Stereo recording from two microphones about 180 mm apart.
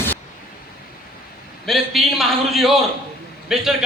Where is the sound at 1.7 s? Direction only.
Centre (ahead or behind).